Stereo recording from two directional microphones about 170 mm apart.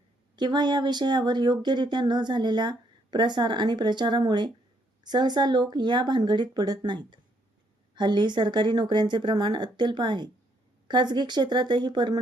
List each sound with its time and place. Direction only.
0.3 s speech: 25° right (ahead or behind)